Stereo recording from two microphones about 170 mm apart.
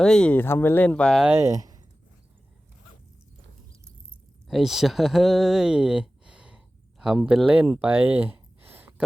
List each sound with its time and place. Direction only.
0.0 s speech: 5° left (ahead or behind)
1.3 s speech: 15° right (ahead or behind)
4.4 s speech: centre (ahead or behind)